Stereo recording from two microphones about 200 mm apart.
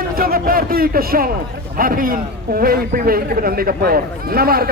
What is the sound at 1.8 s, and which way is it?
A man's voice, 45° right (ahead or behind).